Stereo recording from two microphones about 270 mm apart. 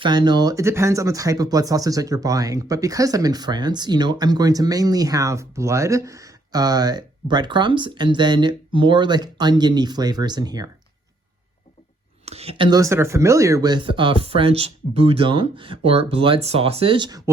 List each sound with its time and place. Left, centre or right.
0.0 s speech: centre
12.2 s speech: right